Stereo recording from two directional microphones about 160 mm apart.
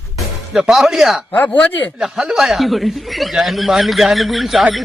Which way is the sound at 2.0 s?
Centre (ahead or behind).